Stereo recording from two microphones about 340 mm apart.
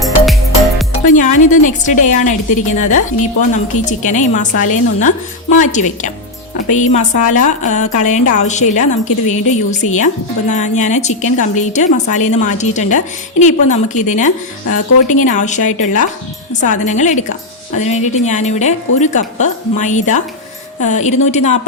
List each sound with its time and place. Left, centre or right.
1.1 s a woman's voice: left
14.7 s speech: left
15.2 s a woman's voice: left